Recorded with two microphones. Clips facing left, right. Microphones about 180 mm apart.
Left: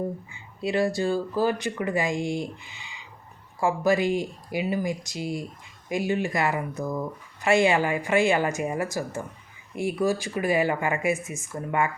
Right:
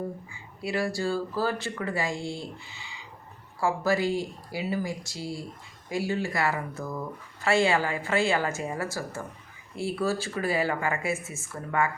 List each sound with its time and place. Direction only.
0.6 s speech: 20° left (ahead or behind)